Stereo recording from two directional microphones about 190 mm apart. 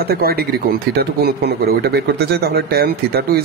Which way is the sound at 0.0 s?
55° right (ahead or behind).